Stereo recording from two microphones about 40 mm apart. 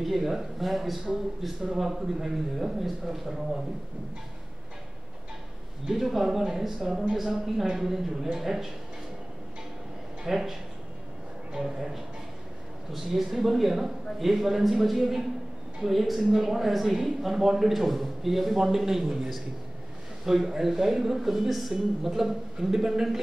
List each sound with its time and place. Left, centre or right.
0.0 s speech: centre
5.9 s a man's voice: centre
10.2 s a man's voice: centre
11.5 s a man's voice: centre